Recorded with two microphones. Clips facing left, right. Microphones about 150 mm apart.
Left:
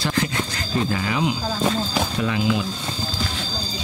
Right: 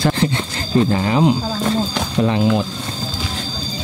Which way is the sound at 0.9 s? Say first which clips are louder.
Right 7 dB; 35° right (ahead or behind).